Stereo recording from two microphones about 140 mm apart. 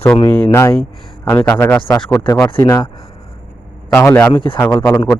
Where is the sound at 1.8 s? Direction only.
35° left (ahead or behind).